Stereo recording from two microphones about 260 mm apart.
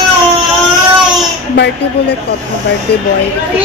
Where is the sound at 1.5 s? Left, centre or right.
Left.